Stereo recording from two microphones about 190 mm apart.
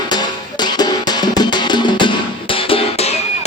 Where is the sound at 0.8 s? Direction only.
20° left (ahead or behind).